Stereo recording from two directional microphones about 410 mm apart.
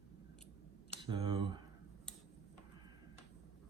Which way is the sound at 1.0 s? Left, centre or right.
Centre.